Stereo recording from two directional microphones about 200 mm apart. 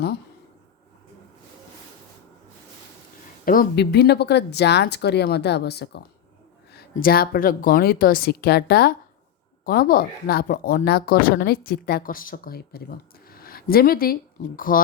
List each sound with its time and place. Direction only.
3.4 s speech: 45° left (ahead or behind)